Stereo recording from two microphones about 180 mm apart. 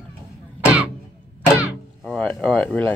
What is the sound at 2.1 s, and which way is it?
Speech, 5° left (ahead or behind).